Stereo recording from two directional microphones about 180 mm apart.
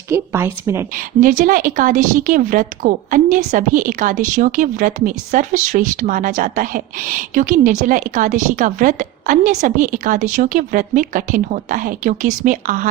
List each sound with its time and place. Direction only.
0.1 s a woman's voice: 15° right (ahead or behind)
0.9 s a woman's voice: 50° right (ahead or behind)